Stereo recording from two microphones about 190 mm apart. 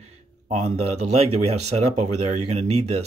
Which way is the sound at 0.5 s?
35° right (ahead or behind).